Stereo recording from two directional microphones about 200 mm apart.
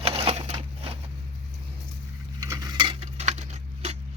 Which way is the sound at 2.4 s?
15° right (ahead or behind).